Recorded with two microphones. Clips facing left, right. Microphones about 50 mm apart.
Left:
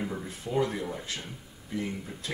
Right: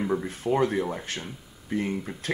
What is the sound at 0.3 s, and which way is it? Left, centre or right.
Speech, right.